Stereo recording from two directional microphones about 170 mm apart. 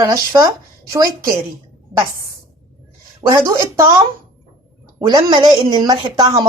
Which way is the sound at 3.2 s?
20° right (ahead or behind).